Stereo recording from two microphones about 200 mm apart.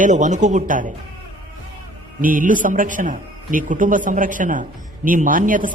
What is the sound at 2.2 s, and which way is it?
A man's voice, 45° right (ahead or behind).